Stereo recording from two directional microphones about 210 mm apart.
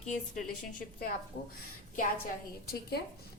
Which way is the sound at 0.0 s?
35° left (ahead or behind).